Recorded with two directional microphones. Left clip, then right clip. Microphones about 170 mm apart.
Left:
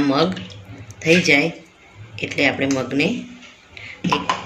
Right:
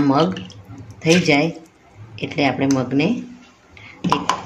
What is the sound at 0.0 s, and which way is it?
Speech, 65° right (ahead or behind).